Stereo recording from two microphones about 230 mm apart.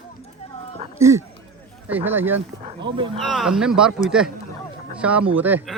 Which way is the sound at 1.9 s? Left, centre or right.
Centre.